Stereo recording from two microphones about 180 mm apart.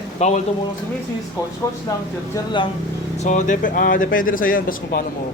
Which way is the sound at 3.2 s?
45° left (ahead or behind).